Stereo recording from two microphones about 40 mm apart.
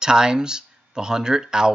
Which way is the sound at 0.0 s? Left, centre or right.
Centre.